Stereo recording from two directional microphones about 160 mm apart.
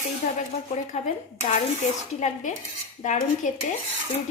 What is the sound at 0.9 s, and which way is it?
Speech, 40° left (ahead or behind).